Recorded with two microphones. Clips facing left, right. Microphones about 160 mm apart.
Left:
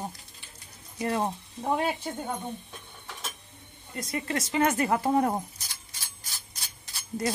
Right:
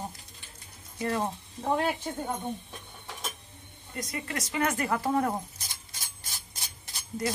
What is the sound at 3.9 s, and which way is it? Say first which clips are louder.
Speech: left 4 dB; 30° left (ahead or behind).